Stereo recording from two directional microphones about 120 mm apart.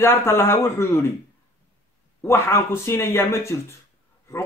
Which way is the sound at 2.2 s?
20° left (ahead or behind).